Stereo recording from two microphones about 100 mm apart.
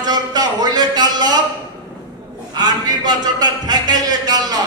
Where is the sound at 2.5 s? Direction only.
45° right (ahead or behind).